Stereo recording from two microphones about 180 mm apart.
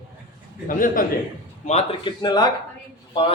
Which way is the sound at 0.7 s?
50° left (ahead or behind).